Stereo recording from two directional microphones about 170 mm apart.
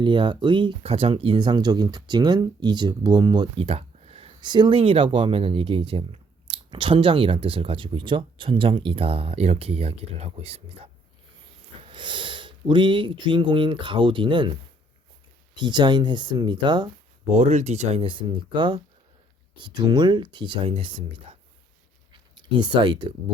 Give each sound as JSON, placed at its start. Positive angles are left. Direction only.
{"t": 0.0, "sound": "speech", "side_deg": -30}
{"t": 11.9, "sound": "speech", "side_deg": -30}
{"t": 15.5, "sound": "speech", "side_deg": -25}
{"t": 17.3, "sound": "speech", "side_deg": -40}
{"t": 22.5, "sound": "speech", "side_deg": -25}